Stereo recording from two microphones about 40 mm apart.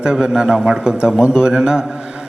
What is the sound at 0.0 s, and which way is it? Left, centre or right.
A man's voice, centre.